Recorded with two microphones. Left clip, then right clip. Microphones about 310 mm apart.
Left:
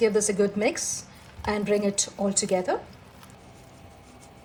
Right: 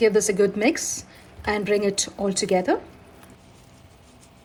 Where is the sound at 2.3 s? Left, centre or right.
Right.